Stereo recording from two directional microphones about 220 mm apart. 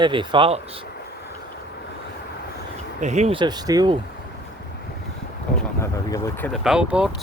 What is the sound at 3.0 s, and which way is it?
Speech, 30° right (ahead or behind).